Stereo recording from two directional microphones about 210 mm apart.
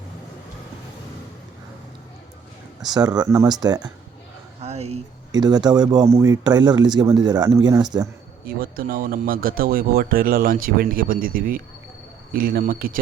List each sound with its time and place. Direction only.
2.9 s speech: 20° right (ahead or behind)
4.6 s a sound: 30° right (ahead or behind)
5.3 s speech: 20° right (ahead or behind)
8.4 s speech: 45° right (ahead or behind)